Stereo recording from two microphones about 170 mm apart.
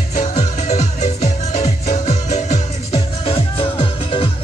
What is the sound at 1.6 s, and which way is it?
Music, 45° left (ahead or behind).